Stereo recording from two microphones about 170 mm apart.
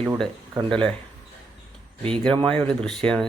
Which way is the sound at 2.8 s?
5° left (ahead or behind).